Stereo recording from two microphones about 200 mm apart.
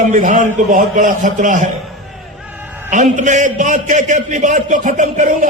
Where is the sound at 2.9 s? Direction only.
40° right (ahead or behind).